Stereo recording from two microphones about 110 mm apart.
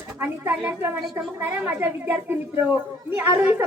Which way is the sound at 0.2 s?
15° right (ahead or behind).